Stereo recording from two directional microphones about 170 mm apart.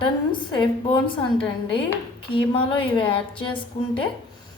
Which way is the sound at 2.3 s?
30° left (ahead or behind).